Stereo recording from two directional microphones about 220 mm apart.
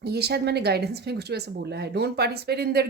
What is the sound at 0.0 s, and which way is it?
A woman's voice, 45° right (ahead or behind).